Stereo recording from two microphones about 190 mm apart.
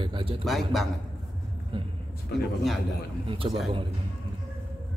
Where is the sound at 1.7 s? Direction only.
30° right (ahead or behind).